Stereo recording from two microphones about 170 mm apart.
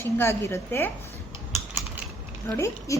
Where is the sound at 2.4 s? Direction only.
15° left (ahead or behind).